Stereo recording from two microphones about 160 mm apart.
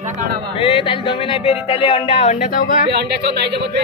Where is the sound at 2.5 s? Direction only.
60° left (ahead or behind).